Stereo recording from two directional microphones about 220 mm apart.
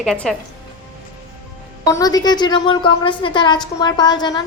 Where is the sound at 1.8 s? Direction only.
15° left (ahead or behind).